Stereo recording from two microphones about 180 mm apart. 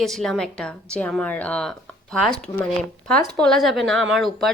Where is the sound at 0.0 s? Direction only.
Centre (ahead or behind).